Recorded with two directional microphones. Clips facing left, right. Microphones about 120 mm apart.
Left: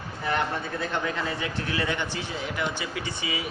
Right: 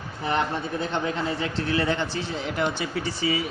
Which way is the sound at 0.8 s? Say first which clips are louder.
Right 2 dB; 25° right (ahead or behind).